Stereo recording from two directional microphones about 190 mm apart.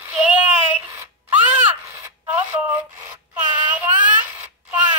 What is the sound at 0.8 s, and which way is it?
Wail, 15° right (ahead or behind).